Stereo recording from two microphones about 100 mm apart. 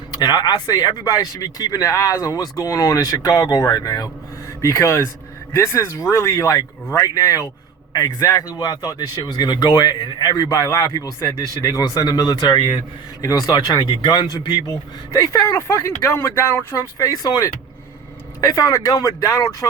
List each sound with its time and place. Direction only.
0.1 s speech: 40° left (ahead or behind)
15.1 s speech: 30° left (ahead or behind)
17.0 s speech: 35° left (ahead or behind)